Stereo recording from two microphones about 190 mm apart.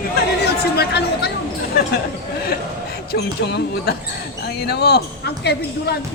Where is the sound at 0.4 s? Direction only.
60° left (ahead or behind).